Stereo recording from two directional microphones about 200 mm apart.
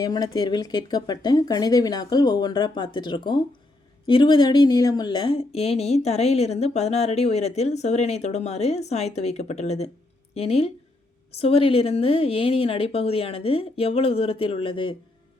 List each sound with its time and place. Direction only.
0.0 s speech: 20° left (ahead or behind)